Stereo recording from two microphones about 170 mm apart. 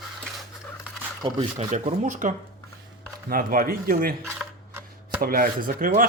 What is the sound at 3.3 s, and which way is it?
Speech, 60° right (ahead or behind).